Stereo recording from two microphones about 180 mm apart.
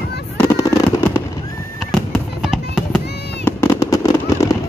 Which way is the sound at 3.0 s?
65° left (ahead or behind).